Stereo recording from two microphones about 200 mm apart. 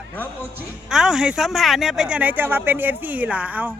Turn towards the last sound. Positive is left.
turn(degrees=-5)  # may be behind; listen again after turning